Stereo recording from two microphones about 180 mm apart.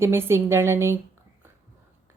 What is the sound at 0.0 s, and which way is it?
Speech, 15° right (ahead or behind).